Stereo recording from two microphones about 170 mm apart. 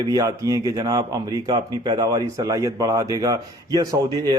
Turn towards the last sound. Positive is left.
turn(degrees=-25)  # may be behind; listen again after turning